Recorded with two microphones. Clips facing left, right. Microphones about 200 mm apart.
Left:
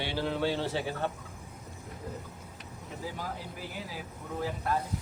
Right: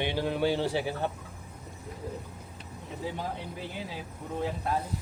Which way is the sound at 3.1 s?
25° right (ahead or behind).